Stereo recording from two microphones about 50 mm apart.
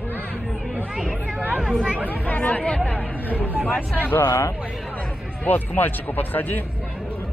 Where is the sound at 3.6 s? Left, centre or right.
Left.